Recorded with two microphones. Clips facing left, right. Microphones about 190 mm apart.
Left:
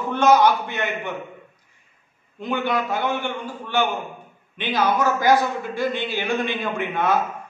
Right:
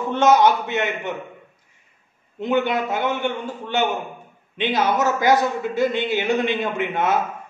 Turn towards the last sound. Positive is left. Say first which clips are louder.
# right 1 dB
turn(degrees=-20)  # may be behind; listen again after turning